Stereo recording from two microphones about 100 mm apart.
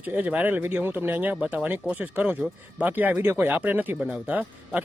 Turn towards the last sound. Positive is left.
turn(degrees=-15)  # may be behind; listen again after turning